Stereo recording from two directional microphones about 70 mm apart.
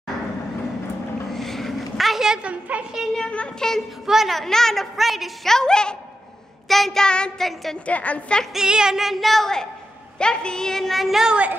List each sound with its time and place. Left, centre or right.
1.3 s a sound: centre
3.2 s child singing: centre
4.0 s speech: centre
6.7 s child singing: centre
7.8 s a woman's voice: centre
8.5 s speech: centre